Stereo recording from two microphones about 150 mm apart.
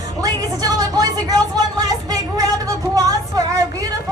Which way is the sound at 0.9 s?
25° right (ahead or behind).